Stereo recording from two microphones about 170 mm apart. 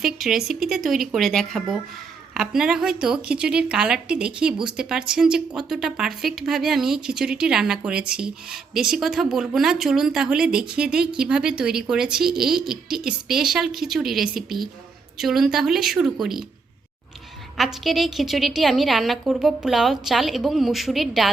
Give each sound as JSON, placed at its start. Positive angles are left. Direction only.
{"t": 0.0, "sound": "a woman's voice", "side_deg": 0}
{"t": 17.6, "sound": "a woman's voice", "side_deg": 0}